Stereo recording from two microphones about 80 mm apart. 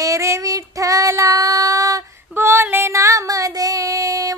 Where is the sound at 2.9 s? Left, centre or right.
Right.